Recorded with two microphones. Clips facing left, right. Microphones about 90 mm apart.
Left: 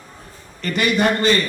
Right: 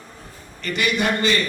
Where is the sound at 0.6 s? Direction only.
40° left (ahead or behind).